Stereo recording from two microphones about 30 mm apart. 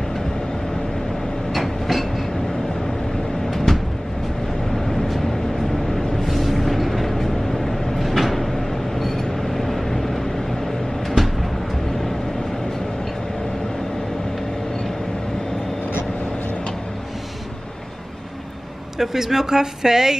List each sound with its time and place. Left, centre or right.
1.5 s train: centre
3.4 s a sound: centre
4.7 s vehicle: centre
6.2 s vehicle: centre
18.9 s speech: centre